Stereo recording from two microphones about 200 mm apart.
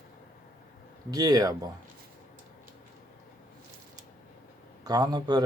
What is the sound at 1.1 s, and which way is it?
Speech, 20° right (ahead or behind).